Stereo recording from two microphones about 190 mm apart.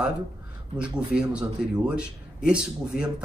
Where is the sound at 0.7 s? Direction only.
5° right (ahead or behind).